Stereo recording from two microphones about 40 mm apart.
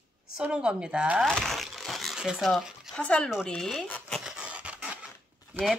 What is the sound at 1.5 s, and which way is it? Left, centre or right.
Crumpling, centre.